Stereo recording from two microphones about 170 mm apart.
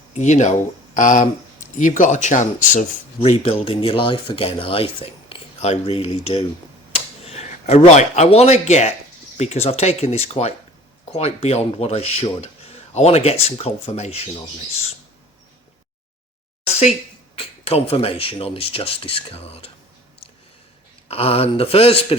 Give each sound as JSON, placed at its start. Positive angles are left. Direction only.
{"t": 0.1, "sound": "speech", "side_deg": 45}
{"t": 3.2, "sound": "speech", "side_deg": 35}
{"t": 17.3, "sound": "speech", "side_deg": 35}
{"t": 21.1, "sound": "speech", "side_deg": 35}